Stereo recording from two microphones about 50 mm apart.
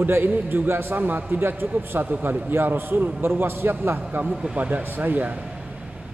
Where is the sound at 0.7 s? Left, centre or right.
Right.